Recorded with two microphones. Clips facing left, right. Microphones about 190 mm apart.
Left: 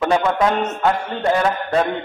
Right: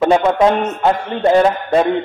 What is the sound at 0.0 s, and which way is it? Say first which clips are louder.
A man's voice: right 5 dB; 25° right (ahead or behind).